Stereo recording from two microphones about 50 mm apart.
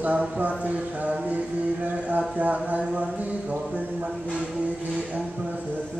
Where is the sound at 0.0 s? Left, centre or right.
Right.